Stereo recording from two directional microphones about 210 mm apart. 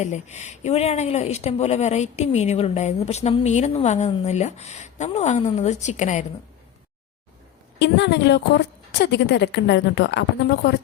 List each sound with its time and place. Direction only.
0.0 s speech: 35° left (ahead or behind)
7.8 s a woman's voice: 55° left (ahead or behind)